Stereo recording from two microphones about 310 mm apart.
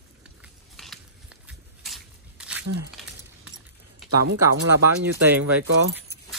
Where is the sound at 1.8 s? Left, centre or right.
Centre.